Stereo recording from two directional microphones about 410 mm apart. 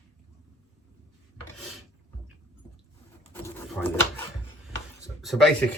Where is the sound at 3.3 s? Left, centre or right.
Centre.